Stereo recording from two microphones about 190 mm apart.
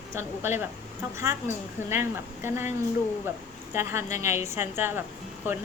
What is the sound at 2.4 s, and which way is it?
Speech, 10° right (ahead or behind).